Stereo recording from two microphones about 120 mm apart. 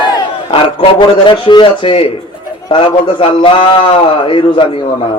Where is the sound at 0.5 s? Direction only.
45° left (ahead or behind).